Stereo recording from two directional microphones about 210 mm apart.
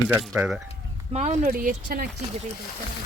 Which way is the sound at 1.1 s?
35° right (ahead or behind).